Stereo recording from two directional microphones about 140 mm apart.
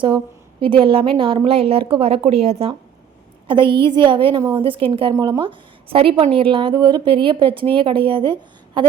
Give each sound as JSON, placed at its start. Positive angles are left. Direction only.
{"t": 0.6, "sound": "a woman's voice", "side_deg": -40}